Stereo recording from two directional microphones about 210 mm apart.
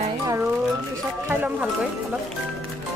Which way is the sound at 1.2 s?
5° right (ahead or behind).